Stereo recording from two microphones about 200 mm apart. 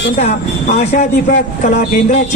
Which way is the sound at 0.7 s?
40° left (ahead or behind).